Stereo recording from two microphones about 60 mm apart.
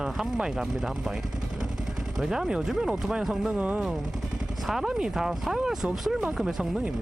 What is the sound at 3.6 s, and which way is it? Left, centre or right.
Speech, right.